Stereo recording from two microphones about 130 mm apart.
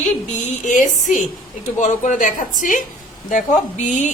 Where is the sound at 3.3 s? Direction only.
75° left (ahead or behind).